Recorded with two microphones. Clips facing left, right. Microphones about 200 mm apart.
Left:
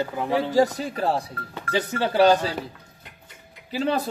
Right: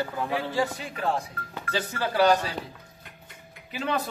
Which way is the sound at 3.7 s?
35° left (ahead or behind).